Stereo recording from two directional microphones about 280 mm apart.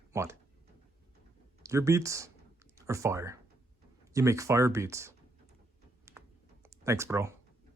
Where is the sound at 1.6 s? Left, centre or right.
Centre.